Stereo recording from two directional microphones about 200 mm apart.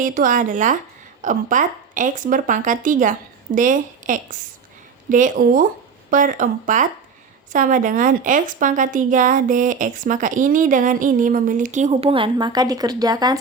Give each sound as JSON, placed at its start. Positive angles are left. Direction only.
{"t": 0.0, "sound": "a woman's voice", "side_deg": -40}